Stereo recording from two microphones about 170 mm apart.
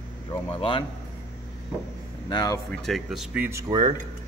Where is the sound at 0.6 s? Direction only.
30° left (ahead or behind).